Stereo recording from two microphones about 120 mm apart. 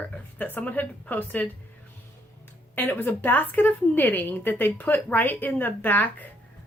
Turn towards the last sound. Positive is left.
turn(degrees=15)  # may be behind; listen again after turning